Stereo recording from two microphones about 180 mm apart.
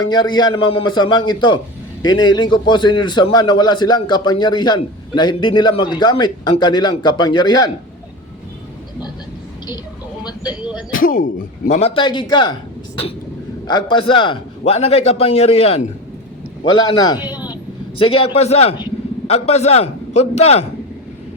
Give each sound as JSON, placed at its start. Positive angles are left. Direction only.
{"t": 0.0, "sound": "a man's voice", "side_deg": 25}
{"t": 10.2, "sound": "a sound", "side_deg": 25}
{"t": 10.9, "sound": "speech", "side_deg": 50}
{"t": 11.8, "sound": "a man's voice", "side_deg": 30}
{"t": 13.7, "sound": "a man's voice", "side_deg": 25}
{"t": 16.6, "sound": "a man's voice", "side_deg": 25}